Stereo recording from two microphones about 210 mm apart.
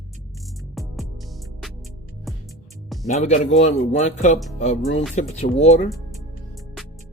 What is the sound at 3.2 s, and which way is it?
Speech, 35° left (ahead or behind).